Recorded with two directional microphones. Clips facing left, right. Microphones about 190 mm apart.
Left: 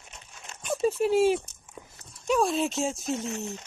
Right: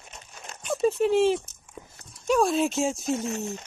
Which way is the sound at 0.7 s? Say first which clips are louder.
Right 2 dB; 5° left (ahead or behind).